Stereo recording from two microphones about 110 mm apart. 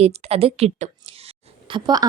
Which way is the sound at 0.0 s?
65° right (ahead or behind).